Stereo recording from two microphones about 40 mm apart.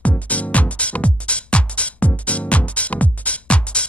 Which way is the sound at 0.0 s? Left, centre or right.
Left.